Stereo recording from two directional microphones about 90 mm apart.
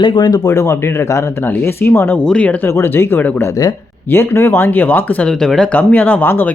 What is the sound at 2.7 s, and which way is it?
Speech, 25° left (ahead or behind).